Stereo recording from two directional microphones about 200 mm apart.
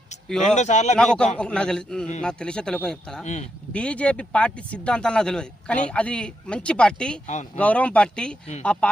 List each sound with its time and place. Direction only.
0.5 s speech: 35° left (ahead or behind)
0.9 s speech: 5° left (ahead or behind)
3.2 s speech: 35° left (ahead or behind)
3.7 s speech: 5° left (ahead or behind)
7.3 s speech: 35° left (ahead or behind)
7.6 s speech: 5° left (ahead or behind)